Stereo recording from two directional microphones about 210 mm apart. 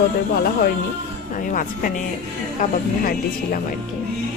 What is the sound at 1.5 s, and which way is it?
Music, 40° left (ahead or behind).